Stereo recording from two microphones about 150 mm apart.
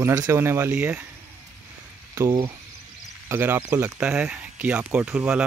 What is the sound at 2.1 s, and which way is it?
Speech, 20° right (ahead or behind).